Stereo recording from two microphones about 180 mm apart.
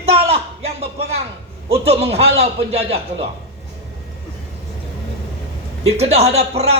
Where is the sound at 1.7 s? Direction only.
35° right (ahead or behind).